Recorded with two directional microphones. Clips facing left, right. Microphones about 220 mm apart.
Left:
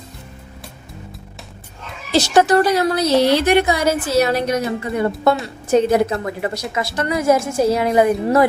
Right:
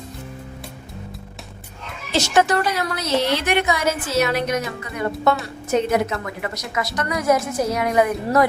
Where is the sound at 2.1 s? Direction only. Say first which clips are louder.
Left 4 dB; 35° left (ahead or behind).